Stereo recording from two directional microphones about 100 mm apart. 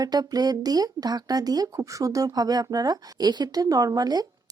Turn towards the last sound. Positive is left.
turn(degrees=-40)  # may be behind; listen again after turning